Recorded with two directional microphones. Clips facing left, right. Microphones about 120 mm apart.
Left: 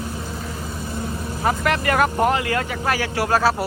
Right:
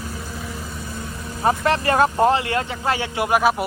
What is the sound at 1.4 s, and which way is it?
Speech, 30° right (ahead or behind).